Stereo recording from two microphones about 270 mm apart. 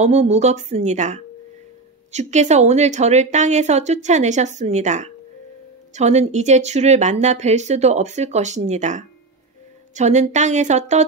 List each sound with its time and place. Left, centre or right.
0.0 s a woman's voice: right